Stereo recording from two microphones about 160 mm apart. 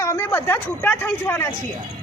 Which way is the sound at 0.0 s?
15° left (ahead or behind).